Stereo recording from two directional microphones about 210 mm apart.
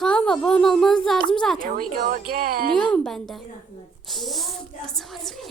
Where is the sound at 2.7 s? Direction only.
5° left (ahead or behind).